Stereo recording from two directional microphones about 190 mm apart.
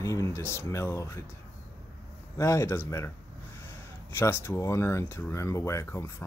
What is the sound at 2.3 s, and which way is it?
Speech, 15° left (ahead or behind).